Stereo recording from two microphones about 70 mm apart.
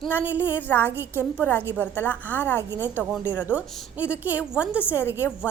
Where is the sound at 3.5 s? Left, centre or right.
Right.